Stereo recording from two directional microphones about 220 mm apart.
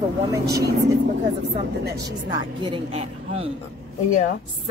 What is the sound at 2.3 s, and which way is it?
A woman's voice, 20° right (ahead or behind).